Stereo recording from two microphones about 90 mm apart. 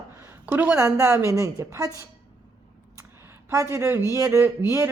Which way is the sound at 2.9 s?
30° right (ahead or behind).